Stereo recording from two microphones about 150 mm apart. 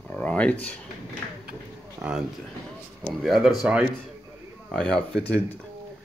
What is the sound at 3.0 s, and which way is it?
Speech, centre (ahead or behind).